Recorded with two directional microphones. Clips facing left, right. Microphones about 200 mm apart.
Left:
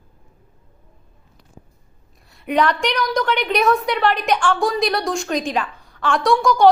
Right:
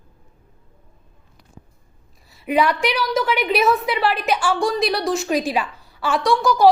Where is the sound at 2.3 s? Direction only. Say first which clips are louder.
Even; centre (ahead or behind).